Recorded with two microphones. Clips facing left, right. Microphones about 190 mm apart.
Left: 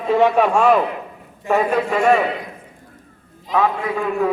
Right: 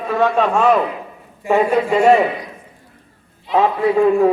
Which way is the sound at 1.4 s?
10° right (ahead or behind).